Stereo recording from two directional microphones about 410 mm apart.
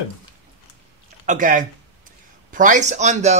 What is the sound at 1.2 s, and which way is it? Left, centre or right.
Speech, centre.